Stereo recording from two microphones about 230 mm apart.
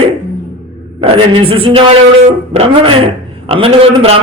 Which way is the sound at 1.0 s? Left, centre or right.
Right.